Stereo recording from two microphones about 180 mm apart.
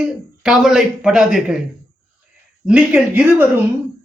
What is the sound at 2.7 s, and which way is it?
Speech, 5° right (ahead or behind).